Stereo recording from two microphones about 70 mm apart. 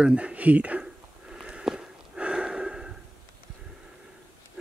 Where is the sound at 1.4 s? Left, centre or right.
Centre.